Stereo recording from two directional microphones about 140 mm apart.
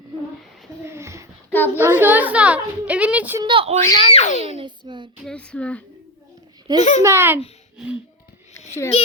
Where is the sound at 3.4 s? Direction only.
40° right (ahead or behind).